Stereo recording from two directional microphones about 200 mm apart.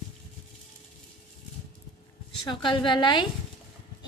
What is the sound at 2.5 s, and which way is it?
Speech, 25° left (ahead or behind).